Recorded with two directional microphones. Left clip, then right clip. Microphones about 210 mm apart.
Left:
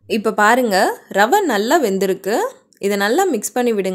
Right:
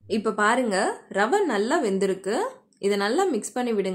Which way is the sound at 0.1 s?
35° left (ahead or behind).